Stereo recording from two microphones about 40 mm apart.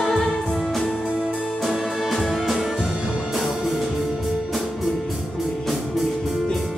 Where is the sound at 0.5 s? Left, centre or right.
Centre.